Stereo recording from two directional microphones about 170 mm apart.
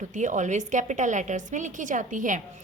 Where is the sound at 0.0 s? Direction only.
45° right (ahead or behind).